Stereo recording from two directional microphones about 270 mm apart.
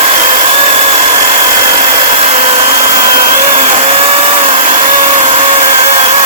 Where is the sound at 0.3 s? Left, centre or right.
Right.